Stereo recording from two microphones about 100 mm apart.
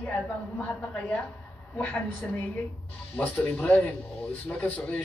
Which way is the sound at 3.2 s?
15° left (ahead or behind).